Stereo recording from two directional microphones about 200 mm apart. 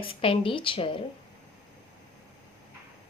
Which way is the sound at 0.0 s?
25° left (ahead or behind).